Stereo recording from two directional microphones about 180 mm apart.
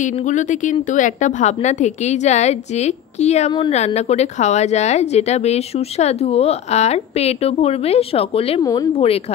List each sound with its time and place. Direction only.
0.0 s a woman's voice: 45° left (ahead or behind)
8.6 s speech: 20° left (ahead or behind)